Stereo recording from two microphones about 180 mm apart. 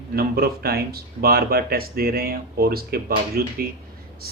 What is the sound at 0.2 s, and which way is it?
Speech, 60° right (ahead or behind).